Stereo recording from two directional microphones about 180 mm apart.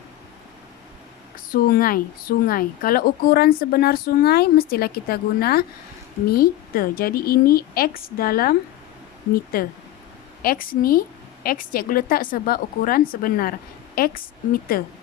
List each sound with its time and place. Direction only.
1.5 s a woman's voice: 55° left (ahead or behind)